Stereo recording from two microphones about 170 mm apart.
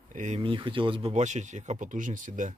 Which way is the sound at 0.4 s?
30° right (ahead or behind).